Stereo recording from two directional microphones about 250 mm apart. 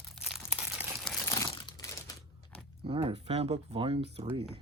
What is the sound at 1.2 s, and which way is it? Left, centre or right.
Crumpling, centre.